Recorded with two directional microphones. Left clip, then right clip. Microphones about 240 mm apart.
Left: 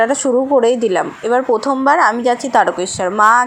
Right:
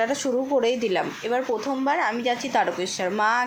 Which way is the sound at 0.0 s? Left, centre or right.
Centre.